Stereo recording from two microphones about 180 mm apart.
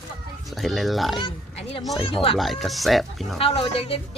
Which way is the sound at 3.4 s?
30° left (ahead or behind).